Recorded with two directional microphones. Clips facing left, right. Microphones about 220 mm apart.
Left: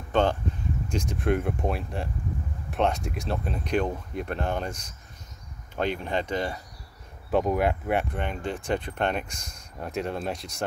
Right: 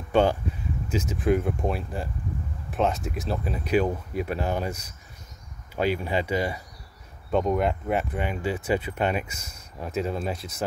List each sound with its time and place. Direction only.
0.1 s speech: 10° right (ahead or behind)
7.2 s speech: 5° left (ahead or behind)